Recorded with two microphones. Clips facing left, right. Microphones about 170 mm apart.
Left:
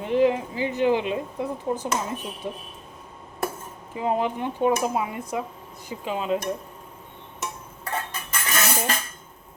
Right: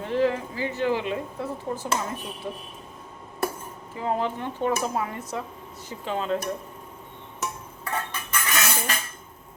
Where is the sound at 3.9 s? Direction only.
15° left (ahead or behind).